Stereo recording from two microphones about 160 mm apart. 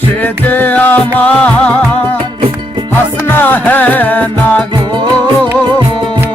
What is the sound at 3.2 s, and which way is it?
Music, 10° left (ahead or behind).